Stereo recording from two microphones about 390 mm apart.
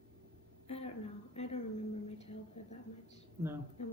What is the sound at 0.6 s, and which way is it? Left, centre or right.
A woman's voice, centre.